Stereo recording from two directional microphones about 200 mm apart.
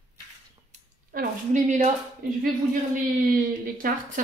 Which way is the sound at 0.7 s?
40° right (ahead or behind).